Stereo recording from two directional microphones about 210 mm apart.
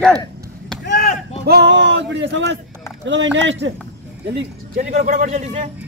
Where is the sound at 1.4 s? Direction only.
55° right (ahead or behind).